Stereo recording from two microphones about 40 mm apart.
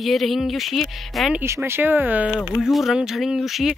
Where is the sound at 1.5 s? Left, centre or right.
Right.